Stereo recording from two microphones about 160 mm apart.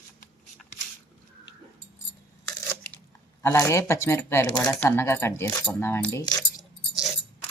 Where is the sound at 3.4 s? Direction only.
20° left (ahead or behind).